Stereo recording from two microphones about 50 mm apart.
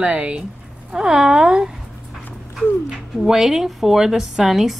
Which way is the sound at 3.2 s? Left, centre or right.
Centre.